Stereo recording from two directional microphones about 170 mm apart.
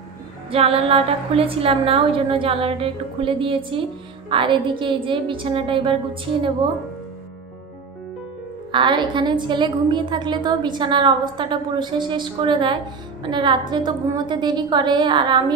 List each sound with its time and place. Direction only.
0.5 s a woman's voice: 35° right (ahead or behind)
8.7 s a woman's voice: 30° right (ahead or behind)